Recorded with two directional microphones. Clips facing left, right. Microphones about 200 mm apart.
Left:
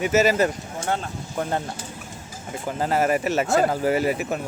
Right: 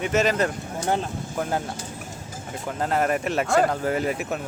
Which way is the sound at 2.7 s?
5° left (ahead or behind).